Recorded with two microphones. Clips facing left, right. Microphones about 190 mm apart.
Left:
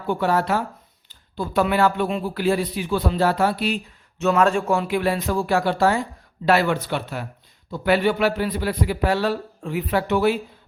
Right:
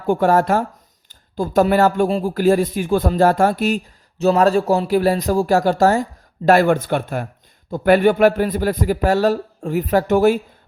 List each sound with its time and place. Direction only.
0.1 s speech: 45° right (ahead or behind)
4.2 s speech: 35° right (ahead or behind)